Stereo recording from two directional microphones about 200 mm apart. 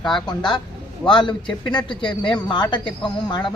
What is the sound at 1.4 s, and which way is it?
Speech, 5° left (ahead or behind).